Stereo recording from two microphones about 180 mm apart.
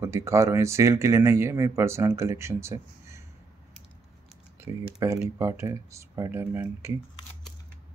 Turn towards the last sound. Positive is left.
turn(degrees=-15)  # may be behind; listen again after turning